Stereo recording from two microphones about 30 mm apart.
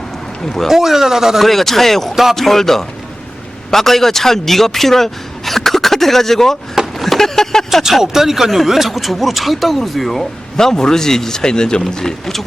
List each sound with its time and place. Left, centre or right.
0.4 s a man's voice: centre
0.7 s speech: centre
1.4 s a man's voice: centre
7.7 s speech: centre
8.0 s speech: centre
10.6 s a man's voice: centre